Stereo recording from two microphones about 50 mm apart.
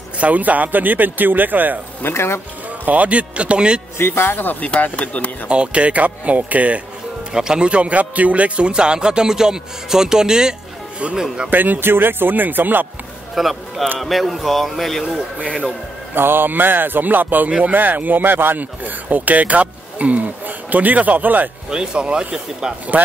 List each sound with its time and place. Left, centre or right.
0.2 s speech: right
2.0 s speech: left
2.8 s speech: right
4.0 s speech: left
4.6 s speech: left
5.5 s speech: right
7.3 s a man's voice: centre
11.5 s speech: right
13.3 s a man's voice: centre
16.2 s speech: right
17.5 s speech: right
17.7 s speech: right
21.6 s a man's voice: centre